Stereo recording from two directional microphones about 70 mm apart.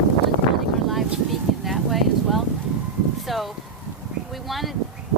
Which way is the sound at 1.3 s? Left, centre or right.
Centre.